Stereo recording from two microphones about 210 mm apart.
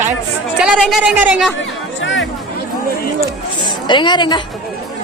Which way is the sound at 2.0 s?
60° left (ahead or behind).